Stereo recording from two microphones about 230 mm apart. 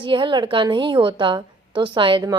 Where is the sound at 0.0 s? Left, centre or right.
Right.